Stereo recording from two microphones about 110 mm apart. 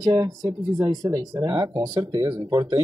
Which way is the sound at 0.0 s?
35° right (ahead or behind).